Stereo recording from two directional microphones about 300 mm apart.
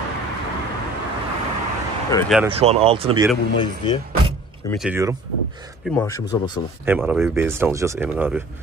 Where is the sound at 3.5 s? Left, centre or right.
Centre.